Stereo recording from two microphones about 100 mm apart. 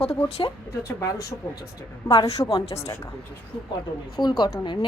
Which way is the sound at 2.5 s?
60° left (ahead or behind).